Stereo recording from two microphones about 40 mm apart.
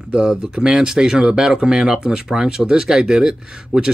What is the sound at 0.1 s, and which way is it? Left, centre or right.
Speech, centre.